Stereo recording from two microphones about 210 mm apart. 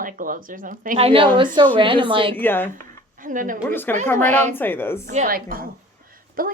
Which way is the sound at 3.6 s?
10° left (ahead or behind).